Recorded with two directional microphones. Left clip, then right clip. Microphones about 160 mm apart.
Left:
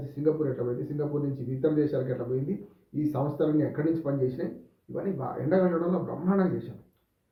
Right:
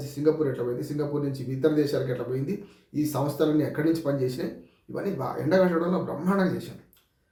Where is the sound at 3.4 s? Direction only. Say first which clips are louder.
Right 3 dB; 10° right (ahead or behind).